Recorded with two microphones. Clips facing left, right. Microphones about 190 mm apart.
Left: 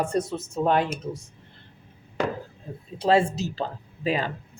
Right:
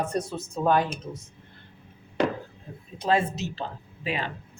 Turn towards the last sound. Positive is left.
turn(degrees=40)  # may be behind; listen again after turning